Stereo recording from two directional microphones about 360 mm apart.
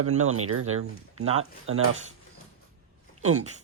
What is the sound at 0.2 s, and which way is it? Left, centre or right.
Speech, right.